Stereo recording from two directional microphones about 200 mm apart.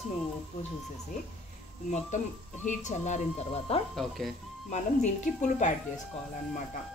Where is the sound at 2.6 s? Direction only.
35° left (ahead or behind).